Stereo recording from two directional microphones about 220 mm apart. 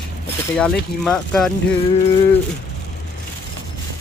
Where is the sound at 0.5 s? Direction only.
5° left (ahead or behind).